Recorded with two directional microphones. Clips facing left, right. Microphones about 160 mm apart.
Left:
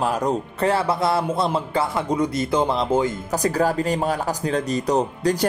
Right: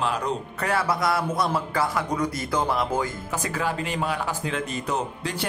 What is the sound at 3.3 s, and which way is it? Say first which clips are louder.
Speech: left 7 dB; 40° left (ahead or behind).